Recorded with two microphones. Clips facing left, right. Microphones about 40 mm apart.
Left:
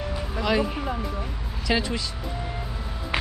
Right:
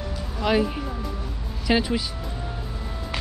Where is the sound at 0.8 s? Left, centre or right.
Left.